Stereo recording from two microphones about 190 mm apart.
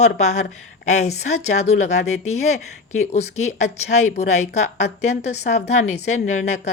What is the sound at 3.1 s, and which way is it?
A woman's voice, 35° left (ahead or behind).